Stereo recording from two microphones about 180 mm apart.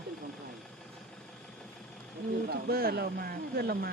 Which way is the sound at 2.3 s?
60° right (ahead or behind).